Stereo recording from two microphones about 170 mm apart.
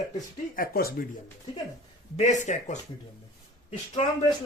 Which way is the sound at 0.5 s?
60° left (ahead or behind).